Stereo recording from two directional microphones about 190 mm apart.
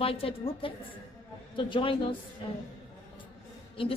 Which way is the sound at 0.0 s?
30° left (ahead or behind).